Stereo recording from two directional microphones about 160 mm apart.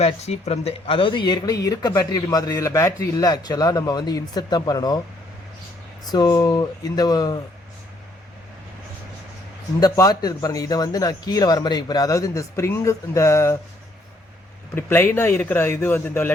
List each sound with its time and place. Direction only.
0.0 s speech: 40° left (ahead or behind); by 4.9 s 25° left (ahead or behind)
6.1 s speech: 25° left (ahead or behind)
9.8 s speech: 20° left (ahead or behind)
14.8 s speech: 15° left (ahead or behind)